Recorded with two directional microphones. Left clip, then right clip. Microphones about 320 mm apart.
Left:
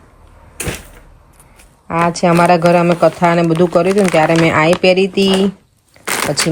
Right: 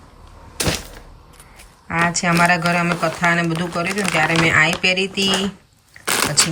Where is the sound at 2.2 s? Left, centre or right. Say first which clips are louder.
Left 7 dB; centre.